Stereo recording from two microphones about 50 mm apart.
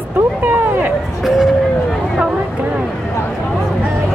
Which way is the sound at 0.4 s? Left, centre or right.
Right.